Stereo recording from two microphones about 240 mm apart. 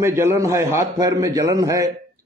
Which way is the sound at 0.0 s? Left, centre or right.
Centre.